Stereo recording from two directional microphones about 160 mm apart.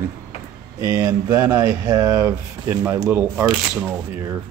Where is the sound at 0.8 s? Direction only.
25° right (ahead or behind).